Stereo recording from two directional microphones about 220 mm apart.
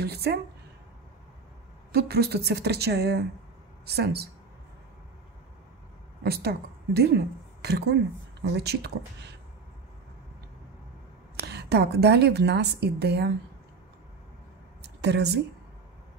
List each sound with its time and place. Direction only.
0.0 s a woman's voice: 45° right (ahead or behind)
1.9 s a woman's voice: 45° right (ahead or behind)
6.2 s a woman's voice: 45° right (ahead or behind)
11.4 s a woman's voice: 50° right (ahead or behind)
14.8 s a sound: 50° right (ahead or behind)